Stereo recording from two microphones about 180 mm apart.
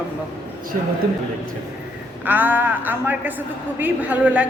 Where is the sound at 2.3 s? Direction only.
10° right (ahead or behind).